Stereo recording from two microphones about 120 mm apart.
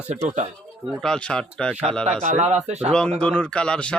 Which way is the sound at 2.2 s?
75° right (ahead or behind).